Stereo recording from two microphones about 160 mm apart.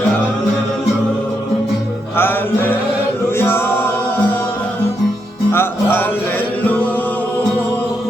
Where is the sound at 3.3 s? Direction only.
15° left (ahead or behind).